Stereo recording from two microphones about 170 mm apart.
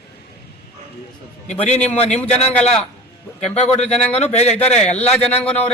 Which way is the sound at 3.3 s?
40° left (ahead or behind).